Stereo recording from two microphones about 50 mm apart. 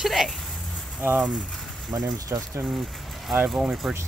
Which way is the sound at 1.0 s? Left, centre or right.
Right.